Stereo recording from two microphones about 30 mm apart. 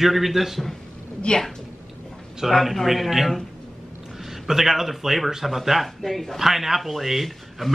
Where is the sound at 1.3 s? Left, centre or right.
Left.